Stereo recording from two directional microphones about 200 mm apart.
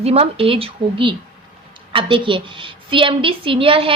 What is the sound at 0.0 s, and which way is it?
A woman's voice, 30° right (ahead or behind).